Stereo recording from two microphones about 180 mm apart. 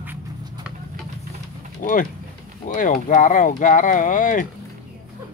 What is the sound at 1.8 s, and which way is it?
Speech, 45° left (ahead or behind).